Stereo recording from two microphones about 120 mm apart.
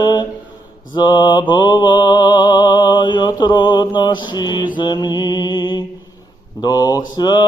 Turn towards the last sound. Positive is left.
turn(degrees=35)  # may be behind; listen again after turning